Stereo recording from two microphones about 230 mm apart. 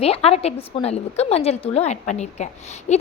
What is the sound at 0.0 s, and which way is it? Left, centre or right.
A woman's voice, left.